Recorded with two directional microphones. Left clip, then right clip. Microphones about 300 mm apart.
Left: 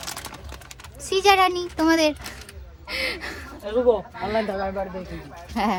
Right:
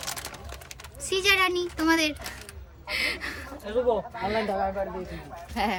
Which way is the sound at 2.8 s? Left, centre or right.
Centre.